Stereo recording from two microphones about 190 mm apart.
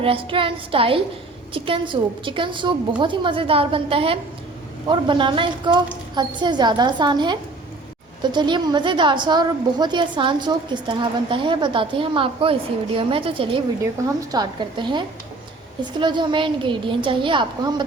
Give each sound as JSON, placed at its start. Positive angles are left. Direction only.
{"t": 0.0, "sound": "a woman's voice", "side_deg": -30}